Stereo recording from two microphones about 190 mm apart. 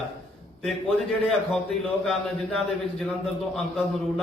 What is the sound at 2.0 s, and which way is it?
A man's voice, centre (ahead or behind).